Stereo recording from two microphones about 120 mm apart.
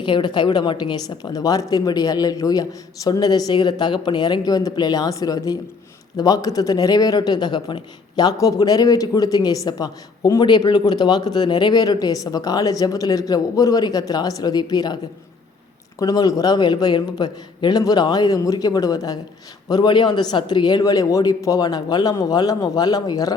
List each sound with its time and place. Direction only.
0.0 s a man's voice: 40° left (ahead or behind)
16.0 s a man's voice: 30° left (ahead or behind)